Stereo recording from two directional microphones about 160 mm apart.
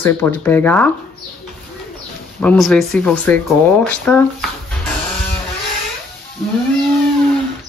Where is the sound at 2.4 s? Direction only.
5° left (ahead or behind).